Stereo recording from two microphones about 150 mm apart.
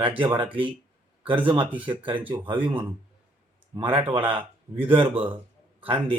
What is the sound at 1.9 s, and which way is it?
A man's voice, 35° right (ahead or behind).